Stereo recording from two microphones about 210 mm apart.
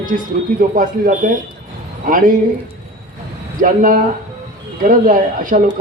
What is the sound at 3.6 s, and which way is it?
A man's voice, 40° right (ahead or behind).